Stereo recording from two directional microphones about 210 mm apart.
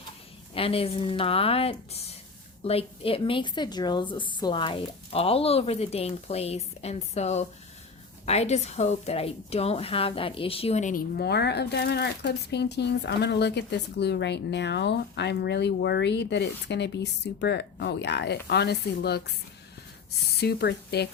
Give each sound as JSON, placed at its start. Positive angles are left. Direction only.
{"t": 0.5, "sound": "a woman's voice", "side_deg": 25}
{"t": 20.4, "sound": "a woman's voice", "side_deg": 50}